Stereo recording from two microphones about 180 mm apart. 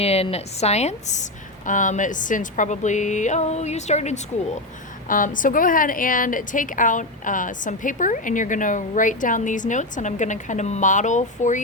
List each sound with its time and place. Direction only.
0.0 s a woman's voice: 35° left (ahead or behind)